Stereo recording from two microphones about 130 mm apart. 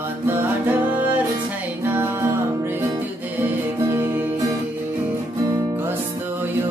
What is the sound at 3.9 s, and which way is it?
Music, 15° right (ahead or behind).